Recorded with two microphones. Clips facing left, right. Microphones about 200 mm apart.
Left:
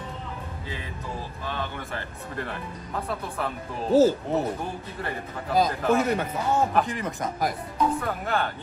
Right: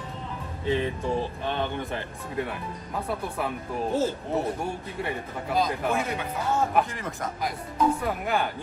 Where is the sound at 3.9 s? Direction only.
35° left (ahead or behind).